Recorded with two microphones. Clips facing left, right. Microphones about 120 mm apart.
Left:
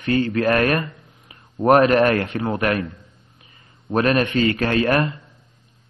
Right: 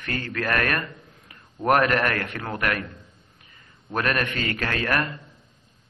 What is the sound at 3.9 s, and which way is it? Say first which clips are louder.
A man's voice: left 7 dB; 25° left (ahead or behind).